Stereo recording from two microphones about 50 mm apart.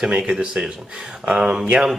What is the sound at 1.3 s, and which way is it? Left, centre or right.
Speech, centre.